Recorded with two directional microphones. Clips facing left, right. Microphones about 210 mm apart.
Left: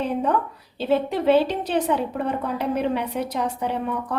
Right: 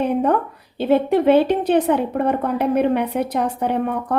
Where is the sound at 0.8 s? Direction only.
55° right (ahead or behind).